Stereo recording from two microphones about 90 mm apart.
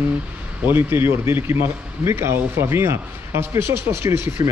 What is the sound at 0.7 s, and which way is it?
A man's voice, 25° right (ahead or behind).